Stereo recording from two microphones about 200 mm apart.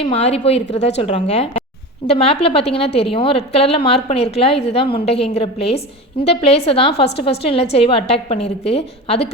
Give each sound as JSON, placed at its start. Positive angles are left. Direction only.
{"t": 0.0, "sound": "a woman's voice", "side_deg": 30}